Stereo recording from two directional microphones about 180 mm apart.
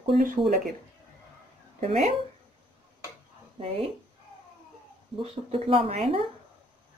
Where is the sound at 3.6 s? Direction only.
30° right (ahead or behind).